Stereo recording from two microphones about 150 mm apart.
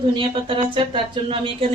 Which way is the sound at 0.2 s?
35° right (ahead or behind).